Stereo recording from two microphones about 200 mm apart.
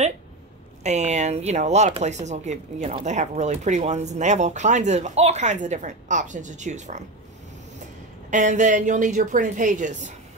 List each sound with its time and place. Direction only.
0.8 s speech: 35° right (ahead or behind)
8.3 s speech: 35° right (ahead or behind)